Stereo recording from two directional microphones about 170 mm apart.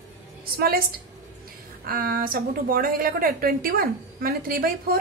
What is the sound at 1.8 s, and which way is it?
A woman's voice, 55° right (ahead or behind).